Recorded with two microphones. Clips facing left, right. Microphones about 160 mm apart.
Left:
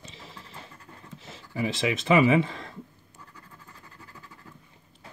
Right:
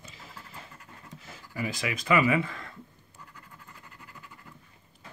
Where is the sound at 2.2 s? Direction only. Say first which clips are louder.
Left 4 dB; 20° left (ahead or behind).